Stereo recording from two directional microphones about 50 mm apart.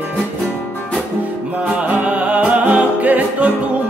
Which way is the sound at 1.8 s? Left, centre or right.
Right.